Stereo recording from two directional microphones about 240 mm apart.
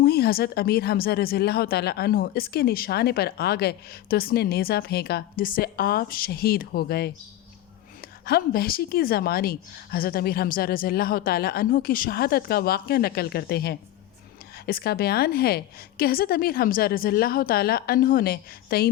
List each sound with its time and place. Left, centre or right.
0.0 s speech: left
8.2 s speech: left